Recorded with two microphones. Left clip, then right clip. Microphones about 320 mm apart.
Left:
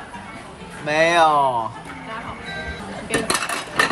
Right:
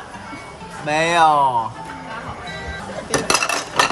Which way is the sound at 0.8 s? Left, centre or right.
Centre.